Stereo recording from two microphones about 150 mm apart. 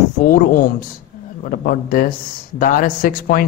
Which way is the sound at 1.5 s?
65° left (ahead or behind).